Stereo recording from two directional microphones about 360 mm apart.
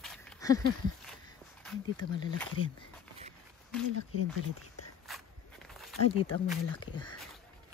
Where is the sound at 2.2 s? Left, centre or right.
Centre.